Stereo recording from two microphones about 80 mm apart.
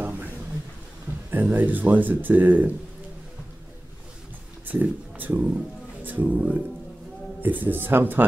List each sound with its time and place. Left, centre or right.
1.3 s speech: right
4.6 s speech: right